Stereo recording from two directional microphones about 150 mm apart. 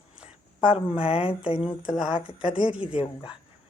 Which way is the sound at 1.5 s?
5° right (ahead or behind).